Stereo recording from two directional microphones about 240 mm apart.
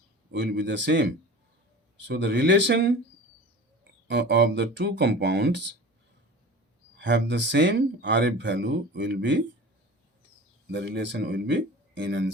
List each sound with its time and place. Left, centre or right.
0.3 s speech: right
4.1 s speech: right
6.9 s speech: right
10.7 s speech: right